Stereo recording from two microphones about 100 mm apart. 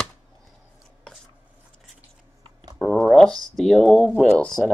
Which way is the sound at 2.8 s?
Centre (ahead or behind).